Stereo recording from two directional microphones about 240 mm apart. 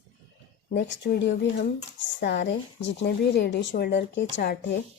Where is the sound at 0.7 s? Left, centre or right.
Left.